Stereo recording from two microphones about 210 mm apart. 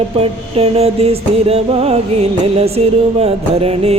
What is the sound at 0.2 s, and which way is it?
Music, 30° right (ahead or behind).